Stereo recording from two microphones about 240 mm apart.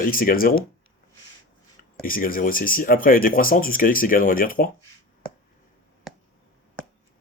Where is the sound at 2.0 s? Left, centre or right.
Left.